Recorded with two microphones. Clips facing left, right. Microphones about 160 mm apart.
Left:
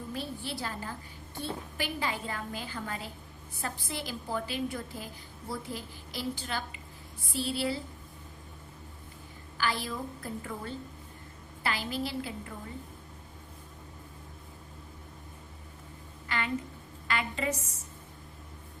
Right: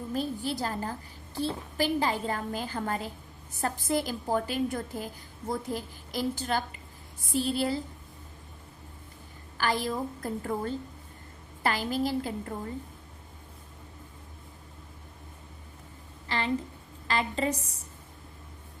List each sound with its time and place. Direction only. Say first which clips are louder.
0.1 s a woman's voice: right 7 dB; 40° right (ahead or behind)
9.6 s a woman's voice: right 4 dB; 45° right (ahead or behind)
16.3 s a sound: right 3 dB; 35° right (ahead or behind)
17.1 s a woman's voice: right 3 dB; 35° right (ahead or behind)